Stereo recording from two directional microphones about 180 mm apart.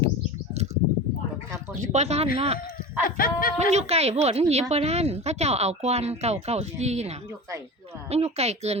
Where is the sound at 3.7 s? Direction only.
35° right (ahead or behind).